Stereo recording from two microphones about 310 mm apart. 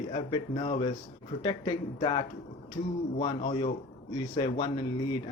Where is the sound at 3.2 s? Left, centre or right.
Centre.